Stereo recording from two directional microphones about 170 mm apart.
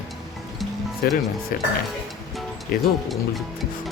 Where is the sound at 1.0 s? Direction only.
65° left (ahead or behind).